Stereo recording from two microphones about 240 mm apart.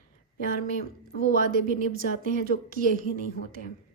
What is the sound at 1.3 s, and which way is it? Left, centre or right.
Speech, right.